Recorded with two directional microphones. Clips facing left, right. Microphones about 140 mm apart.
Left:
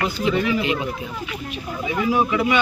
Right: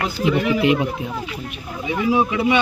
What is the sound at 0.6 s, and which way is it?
Speech, 70° right (ahead or behind).